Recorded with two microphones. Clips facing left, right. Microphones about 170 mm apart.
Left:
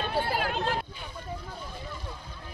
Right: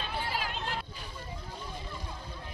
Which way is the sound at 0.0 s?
60° left (ahead or behind).